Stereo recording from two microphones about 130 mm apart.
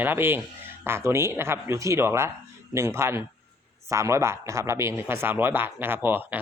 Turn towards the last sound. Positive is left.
turn(degrees=-15)  # may be behind; listen again after turning